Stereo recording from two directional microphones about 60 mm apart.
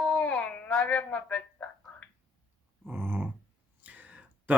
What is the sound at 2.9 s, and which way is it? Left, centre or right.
Speech, right.